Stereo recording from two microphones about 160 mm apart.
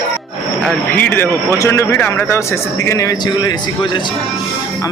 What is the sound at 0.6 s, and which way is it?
A man's voice, 5° left (ahead or behind).